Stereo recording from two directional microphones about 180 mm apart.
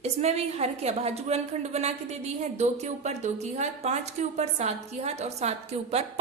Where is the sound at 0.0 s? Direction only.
35° right (ahead or behind).